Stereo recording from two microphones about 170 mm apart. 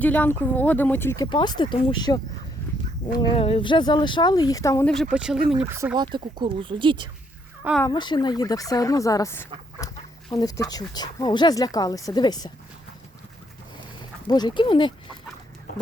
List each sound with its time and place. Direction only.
0.0 s speech: 10° left (ahead or behind)
5.1 s speech: 5° right (ahead or behind); by 7.1 s 30° right (ahead or behind)
7.9 s speech: 25° left (ahead or behind)
14.3 s speech: 25° left (ahead or behind)